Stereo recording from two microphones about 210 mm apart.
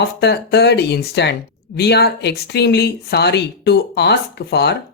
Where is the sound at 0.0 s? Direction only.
50° left (ahead or behind).